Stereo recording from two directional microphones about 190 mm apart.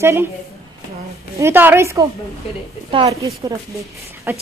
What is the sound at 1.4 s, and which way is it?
Speech, 10° right (ahead or behind).